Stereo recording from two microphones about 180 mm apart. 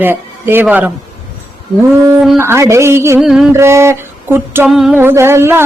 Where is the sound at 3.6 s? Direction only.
15° right (ahead or behind).